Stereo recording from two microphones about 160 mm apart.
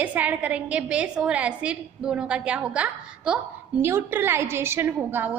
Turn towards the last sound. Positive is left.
turn(degrees=-10)  # may be behind; listen again after turning